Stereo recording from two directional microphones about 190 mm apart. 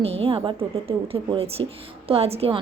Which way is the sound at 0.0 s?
30° right (ahead or behind).